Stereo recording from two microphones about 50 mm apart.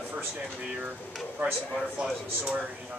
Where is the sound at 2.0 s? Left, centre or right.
Centre.